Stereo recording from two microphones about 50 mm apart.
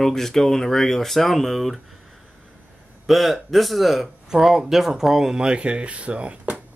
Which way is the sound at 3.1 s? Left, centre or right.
Centre.